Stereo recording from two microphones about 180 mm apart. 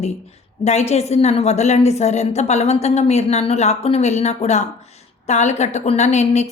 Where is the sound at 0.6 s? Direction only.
40° left (ahead or behind).